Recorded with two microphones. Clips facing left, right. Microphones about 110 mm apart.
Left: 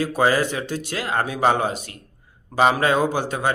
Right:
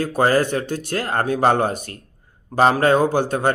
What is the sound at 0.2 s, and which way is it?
Speech, 45° right (ahead or behind).